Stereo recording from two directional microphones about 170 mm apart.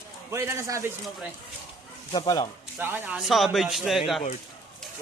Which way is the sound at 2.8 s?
10° right (ahead or behind).